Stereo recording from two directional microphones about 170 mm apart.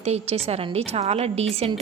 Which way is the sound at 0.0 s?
35° right (ahead or behind).